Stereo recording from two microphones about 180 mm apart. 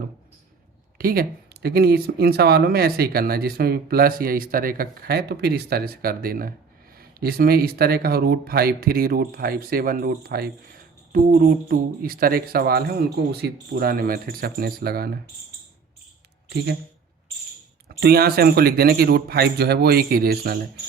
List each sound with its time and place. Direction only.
0.9 s speech: 55° right (ahead or behind)
17.8 s speech: 60° right (ahead or behind)